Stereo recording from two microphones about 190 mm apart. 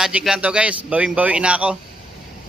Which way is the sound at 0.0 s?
Centre (ahead or behind).